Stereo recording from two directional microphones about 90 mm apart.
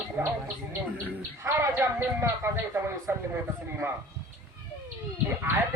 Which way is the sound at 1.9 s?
25° right (ahead or behind).